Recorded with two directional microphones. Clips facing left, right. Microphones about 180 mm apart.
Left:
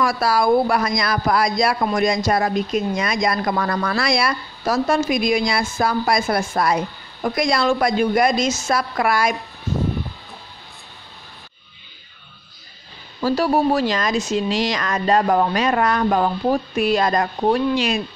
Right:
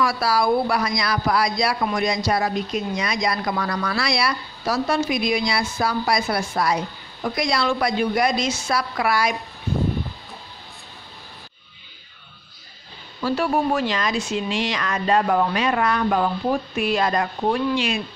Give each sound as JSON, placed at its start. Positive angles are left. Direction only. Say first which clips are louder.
{"t": 0.0, "sound": "speech", "louder": "left 2 dB", "side_deg": 50}
{"t": 13.2, "sound": "speech", "louder": "left 3 dB", "side_deg": 40}